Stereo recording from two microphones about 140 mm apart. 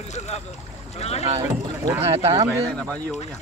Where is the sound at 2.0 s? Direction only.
45° right (ahead or behind).